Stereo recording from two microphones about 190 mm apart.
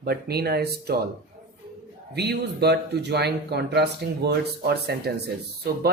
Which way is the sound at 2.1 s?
60° right (ahead or behind).